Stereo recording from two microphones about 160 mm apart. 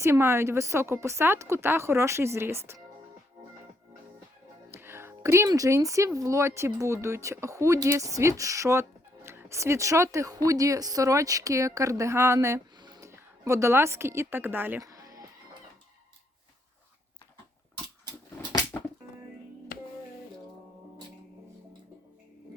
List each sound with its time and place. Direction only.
0.0 s a woman's voice: 15° right (ahead or behind)
4.7 s speech: 15° right (ahead or behind)
18.7 s music: 10° left (ahead or behind)
19.7 s music: 60° left (ahead or behind)